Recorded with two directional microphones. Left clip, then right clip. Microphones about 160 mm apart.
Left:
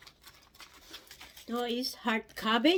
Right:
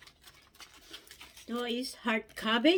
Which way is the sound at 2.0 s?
25° left (ahead or behind).